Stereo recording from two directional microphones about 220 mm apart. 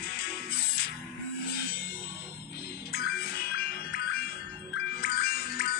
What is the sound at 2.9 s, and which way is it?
Music, 45° left (ahead or behind).